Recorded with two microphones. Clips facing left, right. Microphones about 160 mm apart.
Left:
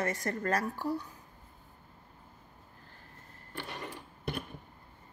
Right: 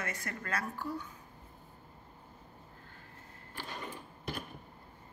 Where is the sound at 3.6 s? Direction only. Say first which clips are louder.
Left 2 dB; 70° left (ahead or behind).